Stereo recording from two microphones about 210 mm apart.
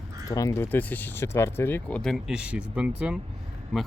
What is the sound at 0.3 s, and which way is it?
Speech, 15° left (ahead or behind).